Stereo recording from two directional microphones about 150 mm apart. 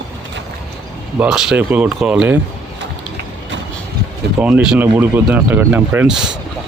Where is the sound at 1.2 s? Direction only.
5° right (ahead or behind).